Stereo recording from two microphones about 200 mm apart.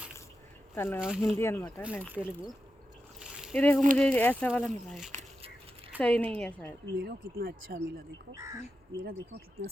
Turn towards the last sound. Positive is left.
turn(degrees=-50)  # may be behind; listen again after turning